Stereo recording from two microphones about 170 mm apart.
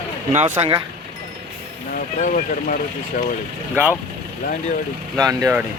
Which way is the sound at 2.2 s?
50° left (ahead or behind).